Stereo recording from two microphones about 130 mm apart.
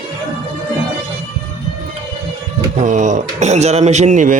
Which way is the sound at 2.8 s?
75° right (ahead or behind).